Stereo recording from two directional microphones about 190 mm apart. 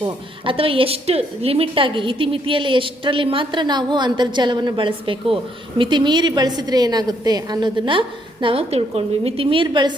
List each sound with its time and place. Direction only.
0.0 s a woman's voice: 30° right (ahead or behind)